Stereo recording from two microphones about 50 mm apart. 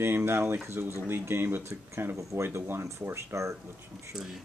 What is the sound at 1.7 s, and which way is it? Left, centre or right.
Speech, right.